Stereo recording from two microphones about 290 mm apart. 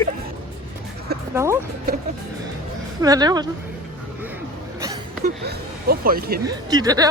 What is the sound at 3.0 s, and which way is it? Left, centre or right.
Speech, centre.